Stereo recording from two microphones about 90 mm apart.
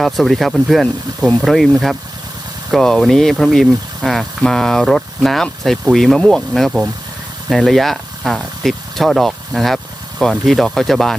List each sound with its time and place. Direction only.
0.0 s speech: centre (ahead or behind)
2.7 s speech: 5° left (ahead or behind)